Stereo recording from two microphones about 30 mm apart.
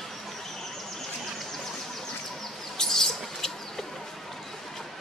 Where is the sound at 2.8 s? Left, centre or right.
Centre.